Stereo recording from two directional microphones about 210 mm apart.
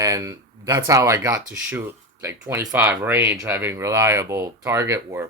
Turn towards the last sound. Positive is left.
turn(degrees=-15)  # may be behind; listen again after turning